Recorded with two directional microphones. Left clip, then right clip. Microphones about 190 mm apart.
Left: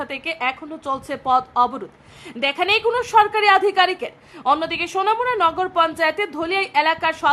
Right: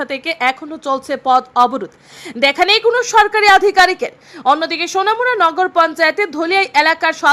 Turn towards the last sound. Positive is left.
turn(degrees=-15)  # may be behind; listen again after turning